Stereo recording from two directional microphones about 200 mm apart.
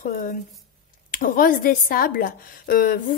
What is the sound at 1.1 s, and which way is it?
Speech, 45° left (ahead or behind).